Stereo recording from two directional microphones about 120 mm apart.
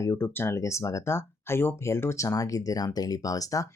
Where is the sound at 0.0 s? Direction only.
20° left (ahead or behind).